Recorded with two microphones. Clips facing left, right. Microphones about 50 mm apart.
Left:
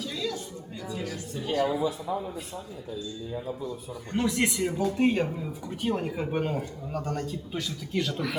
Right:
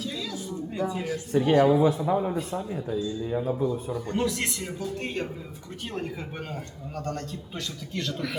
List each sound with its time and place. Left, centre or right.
0.0 s a sound: centre
0.8 s a man's voice: right
1.3 s a man's voice: right
2.0 s a man's voice: right
4.1 s speech: left; by 8.4 s centre